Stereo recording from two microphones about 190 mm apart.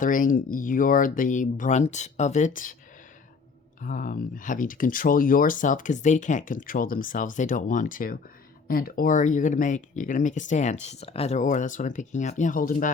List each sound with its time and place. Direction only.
0.0 s speech: 45° left (ahead or behind)
3.8 s speech: 45° left (ahead or behind)